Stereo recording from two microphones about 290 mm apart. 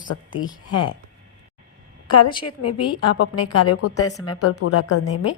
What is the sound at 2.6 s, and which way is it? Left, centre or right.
A woman's voice, left.